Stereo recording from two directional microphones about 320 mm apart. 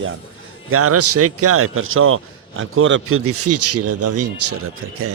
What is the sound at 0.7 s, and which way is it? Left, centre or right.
A man's voice, right.